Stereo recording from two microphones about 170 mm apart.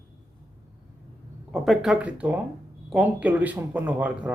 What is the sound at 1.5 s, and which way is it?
Speech, centre (ahead or behind).